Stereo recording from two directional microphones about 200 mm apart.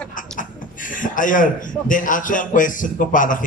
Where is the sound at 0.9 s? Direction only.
40° left (ahead or behind).